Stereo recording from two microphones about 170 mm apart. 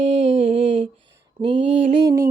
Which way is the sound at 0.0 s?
35° right (ahead or behind).